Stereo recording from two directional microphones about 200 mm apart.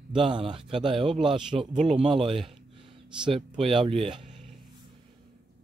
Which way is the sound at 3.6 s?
25° right (ahead or behind).